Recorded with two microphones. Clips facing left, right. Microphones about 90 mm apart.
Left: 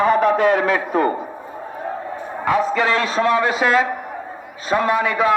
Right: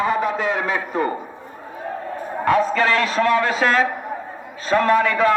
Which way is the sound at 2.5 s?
15° left (ahead or behind).